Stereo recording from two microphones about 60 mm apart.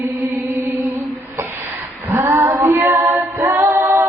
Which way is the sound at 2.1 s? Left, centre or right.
Right.